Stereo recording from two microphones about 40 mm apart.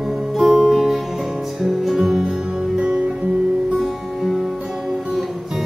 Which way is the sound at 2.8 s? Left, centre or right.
Right.